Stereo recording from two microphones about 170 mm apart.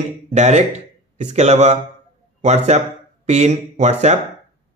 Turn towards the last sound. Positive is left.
turn(degrees=-40)  # may be behind; listen again after turning